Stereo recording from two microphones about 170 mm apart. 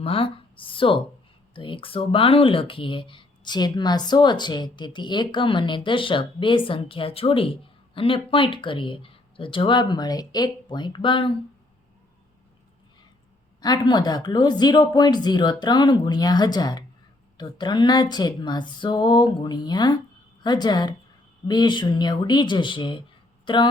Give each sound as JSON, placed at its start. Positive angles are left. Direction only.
{"t": 0.0, "sound": "speech", "side_deg": 30}
{"t": 13.6, "sound": "speech", "side_deg": 25}